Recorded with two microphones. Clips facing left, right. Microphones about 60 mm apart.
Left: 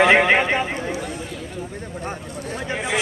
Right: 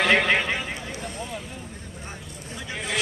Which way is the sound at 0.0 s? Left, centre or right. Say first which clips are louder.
Left 6 dB; left.